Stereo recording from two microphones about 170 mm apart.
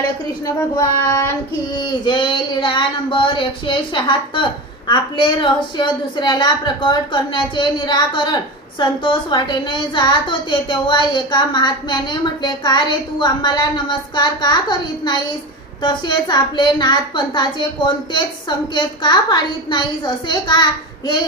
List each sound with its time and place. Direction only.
0.4 s child singing: 15° left (ahead or behind)
1.7 s a woman's voice: 25° left (ahead or behind)